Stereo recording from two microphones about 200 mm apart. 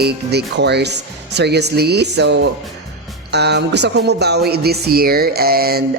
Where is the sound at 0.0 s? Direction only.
55° right (ahead or behind).